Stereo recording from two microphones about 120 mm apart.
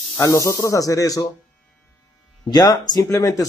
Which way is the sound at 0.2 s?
25° left (ahead or behind).